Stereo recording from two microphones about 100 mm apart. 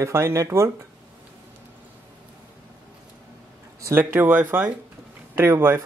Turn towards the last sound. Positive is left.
turn(degrees=-25)  # may be behind; listen again after turning